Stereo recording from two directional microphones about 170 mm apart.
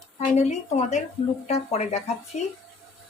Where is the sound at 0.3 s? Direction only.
40° left (ahead or behind).